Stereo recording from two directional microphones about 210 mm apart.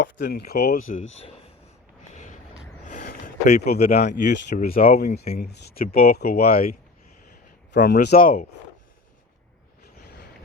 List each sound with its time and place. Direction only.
0.0 s speech: 55° left (ahead or behind); by 1.0 s 40° left (ahead or behind)
3.5 s speech: 50° left (ahead or behind)
3.9 s speech: 30° left (ahead or behind)
4.2 s speech: 55° left (ahead or behind)
4.5 s speech: 45° left (ahead or behind)
7.7 s speech: 55° left (ahead or behind)
7.9 s speech: 40° left (ahead or behind)